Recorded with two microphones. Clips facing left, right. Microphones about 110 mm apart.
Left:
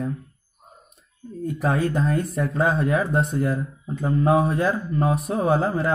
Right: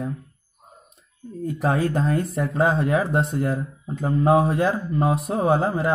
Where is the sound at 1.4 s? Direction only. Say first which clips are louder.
Right 1 dB; 30° right (ahead or behind).